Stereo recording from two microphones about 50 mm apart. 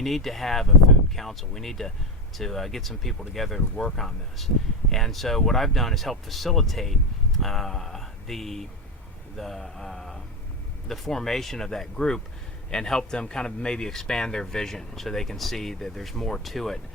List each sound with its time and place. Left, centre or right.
0.0 s speech: centre